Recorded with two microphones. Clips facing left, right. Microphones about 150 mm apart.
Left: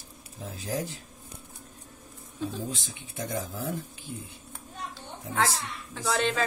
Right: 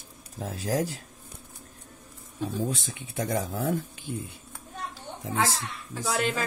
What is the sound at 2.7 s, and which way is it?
Speech, 80° right.